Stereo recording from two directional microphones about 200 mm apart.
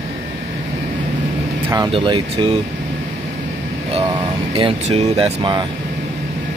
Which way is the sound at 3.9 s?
25° right (ahead or behind).